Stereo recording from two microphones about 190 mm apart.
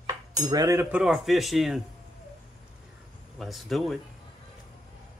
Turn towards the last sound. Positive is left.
turn(degrees=0)  # may be behind; listen again after turning